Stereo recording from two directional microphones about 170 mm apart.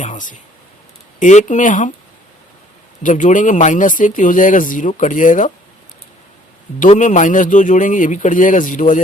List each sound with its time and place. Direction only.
0.0 s speech: 50° left (ahead or behind)
3.0 s speech: 50° left (ahead or behind)
6.7 s speech: 45° left (ahead or behind)